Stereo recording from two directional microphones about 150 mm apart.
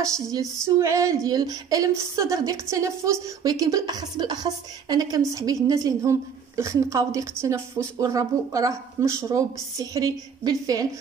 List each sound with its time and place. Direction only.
0.0 s a woman's voice: 20° right (ahead or behind)